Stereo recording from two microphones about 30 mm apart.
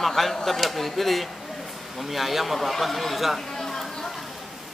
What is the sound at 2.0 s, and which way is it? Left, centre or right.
A man's voice, centre.